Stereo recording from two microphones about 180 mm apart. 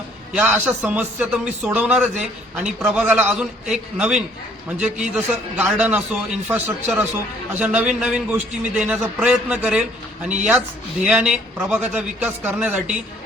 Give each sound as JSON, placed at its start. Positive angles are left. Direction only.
{"t": 0.3, "sound": "a man's voice", "side_deg": -10}
{"t": 11.0, "sound": "a man's voice", "side_deg": -5}